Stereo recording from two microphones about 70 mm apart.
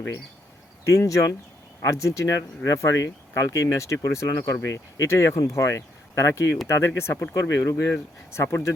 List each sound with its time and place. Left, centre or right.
0.9 s speech: left